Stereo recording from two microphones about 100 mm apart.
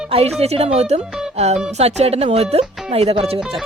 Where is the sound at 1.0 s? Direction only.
5° right (ahead or behind).